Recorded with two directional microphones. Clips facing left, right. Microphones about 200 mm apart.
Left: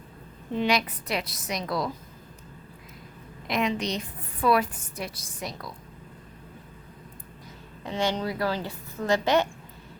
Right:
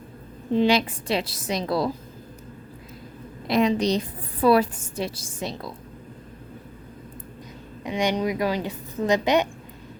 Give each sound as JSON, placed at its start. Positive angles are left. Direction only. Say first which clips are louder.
{"t": 0.5, "sound": "a woman's voice", "louder": "right 6 dB", "side_deg": -30}
{"t": 3.4, "sound": "a woman's voice", "louder": "right 6 dB", "side_deg": -35}
{"t": 7.9, "sound": "a woman's voice", "louder": "right 4 dB", "side_deg": -15}